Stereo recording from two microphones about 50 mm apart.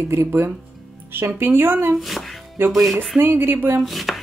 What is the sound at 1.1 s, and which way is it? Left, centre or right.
Speech, right.